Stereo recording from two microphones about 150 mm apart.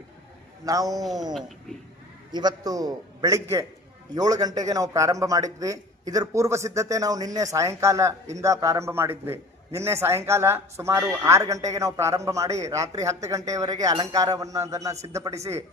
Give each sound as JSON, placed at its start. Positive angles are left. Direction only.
{"t": 0.6, "sound": "a man's voice", "side_deg": -25}
{"t": 1.3, "sound": "speech", "side_deg": 0}
{"t": 2.3, "sound": "a man's voice", "side_deg": -25}